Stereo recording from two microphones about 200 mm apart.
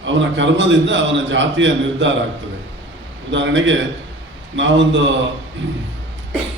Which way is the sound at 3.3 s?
65° right (ahead or behind).